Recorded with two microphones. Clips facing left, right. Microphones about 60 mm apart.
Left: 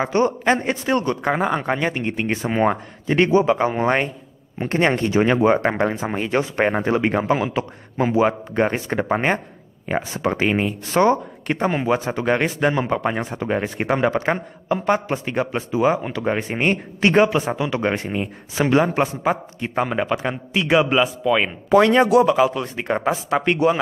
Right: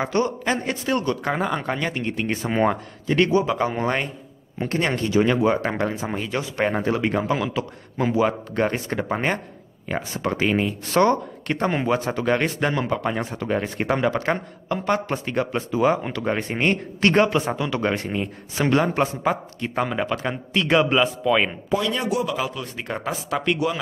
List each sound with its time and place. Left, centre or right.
0.2 s a man's voice: left
2.4 s a man's voice: centre
3.1 s a man's voice: left; by 21.5 s centre
21.6 s speech: left
22.2 s speech: left